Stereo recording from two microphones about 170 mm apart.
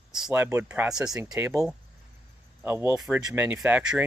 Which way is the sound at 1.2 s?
15° right (ahead or behind).